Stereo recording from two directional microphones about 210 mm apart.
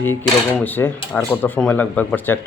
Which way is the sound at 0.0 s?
10° left (ahead or behind).